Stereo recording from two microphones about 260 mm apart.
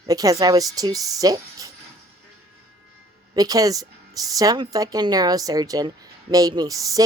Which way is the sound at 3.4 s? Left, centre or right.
Centre.